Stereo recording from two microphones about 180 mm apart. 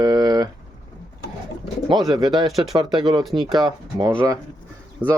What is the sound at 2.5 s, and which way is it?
Speech, centre (ahead or behind).